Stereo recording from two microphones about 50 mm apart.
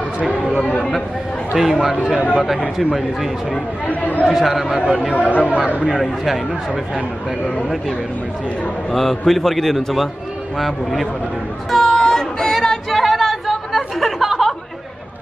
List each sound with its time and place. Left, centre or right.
1.5 s a man's voice: centre
3.8 s speech: left
4.3 s a man's voice: centre
5.1 s speech: left
5.9 s a man's voice: centre
8.9 s a man's voice: centre
11.7 s female singing: centre